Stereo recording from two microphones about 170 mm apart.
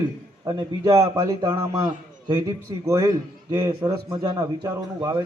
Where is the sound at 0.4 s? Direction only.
25° right (ahead or behind).